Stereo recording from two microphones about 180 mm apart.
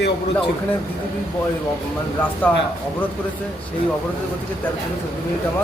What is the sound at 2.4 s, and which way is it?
Speech, 10° left (ahead or behind).